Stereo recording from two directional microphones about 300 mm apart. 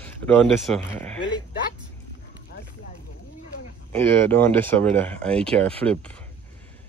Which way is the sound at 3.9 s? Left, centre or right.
Centre.